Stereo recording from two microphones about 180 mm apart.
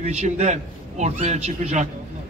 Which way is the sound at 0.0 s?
40° right (ahead or behind).